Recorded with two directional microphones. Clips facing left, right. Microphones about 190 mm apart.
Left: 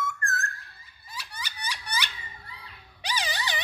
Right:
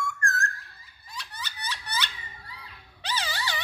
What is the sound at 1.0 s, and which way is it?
Baby laughter, 10° left (ahead or behind).